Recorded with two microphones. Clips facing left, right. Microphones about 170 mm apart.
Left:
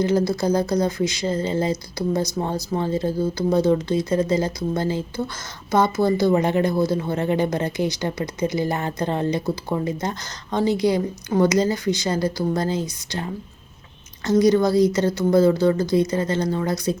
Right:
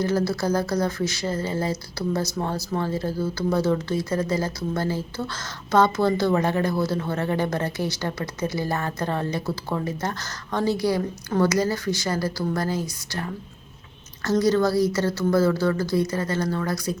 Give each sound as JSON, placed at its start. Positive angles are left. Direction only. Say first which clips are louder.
{"t": 0.0, "sound": "a woman's voice", "louder": "left 3 dB", "side_deg": 15}